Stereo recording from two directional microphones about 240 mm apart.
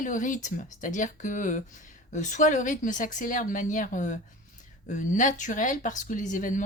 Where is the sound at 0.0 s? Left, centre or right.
Left.